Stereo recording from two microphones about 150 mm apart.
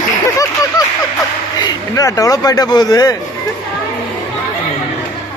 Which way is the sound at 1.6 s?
25° left (ahead or behind).